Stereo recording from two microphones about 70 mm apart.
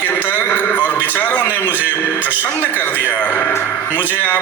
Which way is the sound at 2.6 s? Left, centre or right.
Left.